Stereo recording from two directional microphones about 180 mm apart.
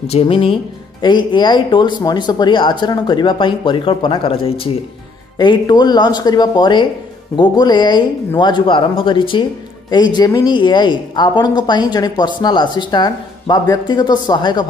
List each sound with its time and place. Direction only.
0.0 s speech: 30° left (ahead or behind)